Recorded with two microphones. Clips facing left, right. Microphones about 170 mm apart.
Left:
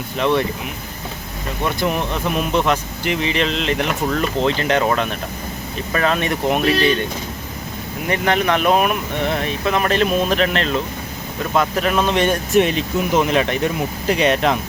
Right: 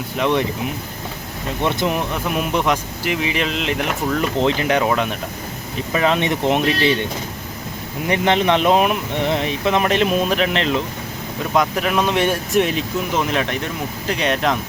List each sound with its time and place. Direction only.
0.2 s speech: 15° right (ahead or behind)
1.6 s speech: 20° right (ahead or behind)
2.0 s speech: 10° right (ahead or behind)
8.0 s speech: 20° right (ahead or behind)
11.8 s speech: 10° right (ahead or behind)